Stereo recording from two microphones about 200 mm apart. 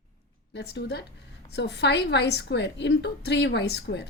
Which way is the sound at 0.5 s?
55° left (ahead or behind).